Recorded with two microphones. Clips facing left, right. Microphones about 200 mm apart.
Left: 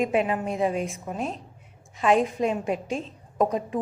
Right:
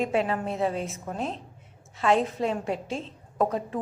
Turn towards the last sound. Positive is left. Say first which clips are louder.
# left 2 dB
turn(degrees=15)  # may be behind; listen again after turning